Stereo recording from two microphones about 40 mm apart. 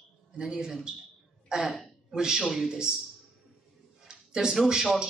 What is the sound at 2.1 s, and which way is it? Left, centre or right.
Speech, centre.